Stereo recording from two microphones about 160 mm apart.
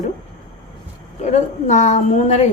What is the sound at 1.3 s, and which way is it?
A woman's voice, 50° left (ahead or behind).